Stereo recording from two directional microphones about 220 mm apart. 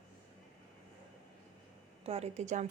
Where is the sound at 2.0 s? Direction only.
30° right (ahead or behind).